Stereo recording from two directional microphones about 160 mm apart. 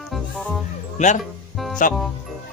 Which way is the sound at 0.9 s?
50° left (ahead or behind).